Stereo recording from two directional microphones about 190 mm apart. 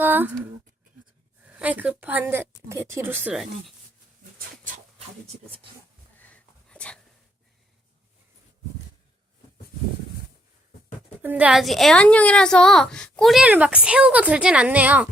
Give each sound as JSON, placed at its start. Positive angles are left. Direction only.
{"t": 0.0, "sound": "a sound", "side_deg": -10}
{"t": 1.5, "sound": "speech", "side_deg": -10}
{"t": 4.4, "sound": "dog", "side_deg": -45}
{"t": 5.3, "sound": "speech", "side_deg": -30}
{"t": 6.1, "sound": "dog", "side_deg": 10}
{"t": 11.2, "sound": "a woman's voice", "side_deg": -10}